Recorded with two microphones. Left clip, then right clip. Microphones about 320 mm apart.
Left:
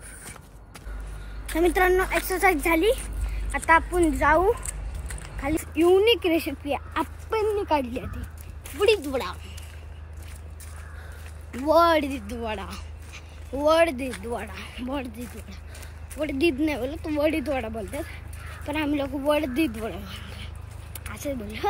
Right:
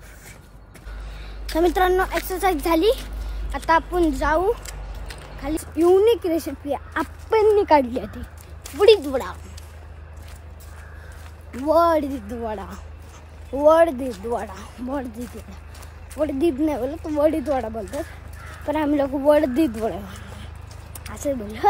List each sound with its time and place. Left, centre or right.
1.5 s speech: centre
5.8 s speech: centre
11.5 s speech: centre
12.0 s a woman's voice: right
12.4 s speech: centre
16.4 s speech: centre
21.1 s speech: centre